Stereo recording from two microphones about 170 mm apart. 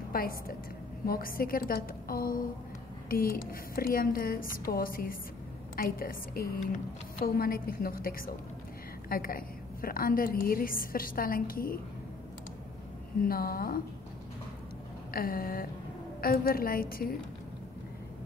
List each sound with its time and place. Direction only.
0.1 s a woman's voice: 60° left (ahead or behind)
13.2 s a woman's voice: 60° left (ahead or behind)
15.1 s a woman's voice: 60° left (ahead or behind)